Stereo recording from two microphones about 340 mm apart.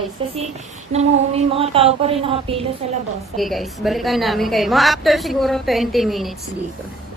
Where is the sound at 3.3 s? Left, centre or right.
Centre.